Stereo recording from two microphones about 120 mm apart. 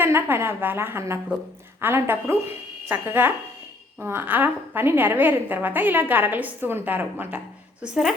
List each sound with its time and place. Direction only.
0.0 s a woman's voice: 15° right (ahead or behind)